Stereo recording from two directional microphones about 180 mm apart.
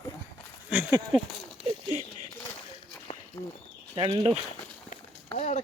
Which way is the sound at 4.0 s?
30° right (ahead or behind).